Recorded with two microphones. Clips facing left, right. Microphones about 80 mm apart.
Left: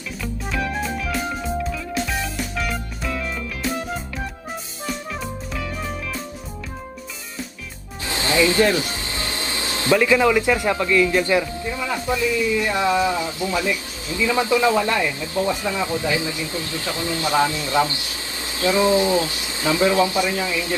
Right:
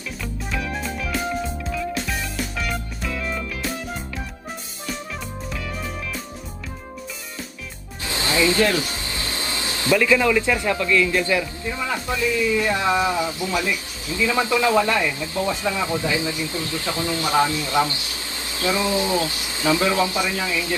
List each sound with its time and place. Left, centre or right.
0.5 s music: centre
8.0 s music: left
9.7 s speech: left
12.8 s speech: right
13.4 s speech: left